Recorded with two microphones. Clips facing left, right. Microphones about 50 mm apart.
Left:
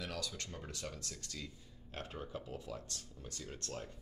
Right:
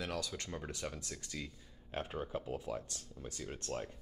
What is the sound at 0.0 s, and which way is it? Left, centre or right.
Speech, right.